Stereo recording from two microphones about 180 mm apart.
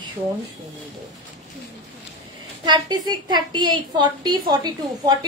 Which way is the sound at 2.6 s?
25° right (ahead or behind).